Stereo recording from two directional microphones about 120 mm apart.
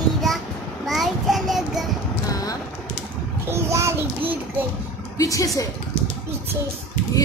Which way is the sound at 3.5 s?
25° right (ahead or behind).